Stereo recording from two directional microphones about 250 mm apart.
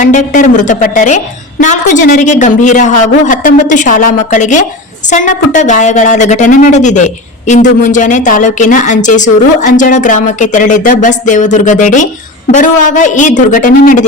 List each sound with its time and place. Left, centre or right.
0.0 s a woman's voice: left